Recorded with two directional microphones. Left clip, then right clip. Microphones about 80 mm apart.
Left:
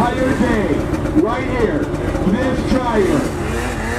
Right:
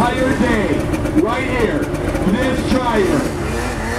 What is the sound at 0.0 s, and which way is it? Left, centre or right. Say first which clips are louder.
Vehicle: right 1 dB; right.